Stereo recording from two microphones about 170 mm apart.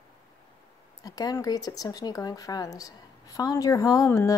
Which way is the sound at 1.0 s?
20° left (ahead or behind).